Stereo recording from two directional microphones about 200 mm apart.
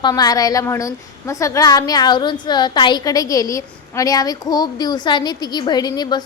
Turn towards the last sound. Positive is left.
turn(degrees=20)  # may be behind; listen again after turning